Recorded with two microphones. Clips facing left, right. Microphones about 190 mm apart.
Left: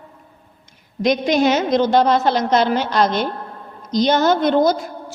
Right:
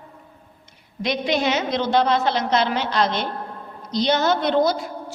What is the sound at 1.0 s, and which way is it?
A woman's voice, 45° left (ahead or behind).